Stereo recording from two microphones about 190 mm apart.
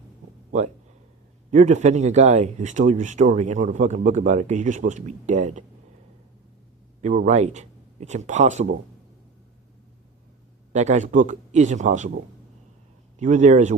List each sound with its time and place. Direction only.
1.5 s speech: 40° right (ahead or behind)
7.0 s speech: 40° right (ahead or behind)
10.7 s speech: 40° right (ahead or behind)
13.1 s speech: 40° right (ahead or behind)